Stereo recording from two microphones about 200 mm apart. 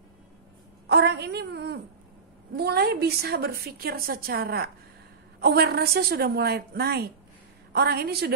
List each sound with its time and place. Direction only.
0.8 s a woman's voice: 55° right (ahead or behind)